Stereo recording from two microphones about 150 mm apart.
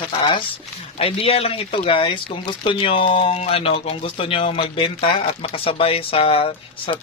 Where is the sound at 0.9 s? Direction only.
40° left (ahead or behind).